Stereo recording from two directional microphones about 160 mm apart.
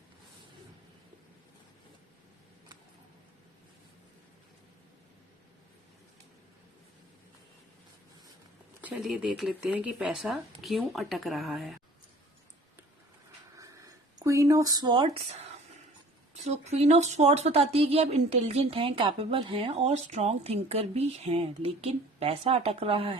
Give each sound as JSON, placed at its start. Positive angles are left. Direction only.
{"t": 8.8, "sound": "speech", "side_deg": -5}
{"t": 13.6, "sound": "a sound", "side_deg": -20}
{"t": 16.4, "sound": "speech", "side_deg": -40}